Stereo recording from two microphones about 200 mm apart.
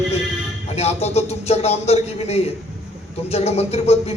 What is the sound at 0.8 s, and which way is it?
A man's voice, 30° left (ahead or behind).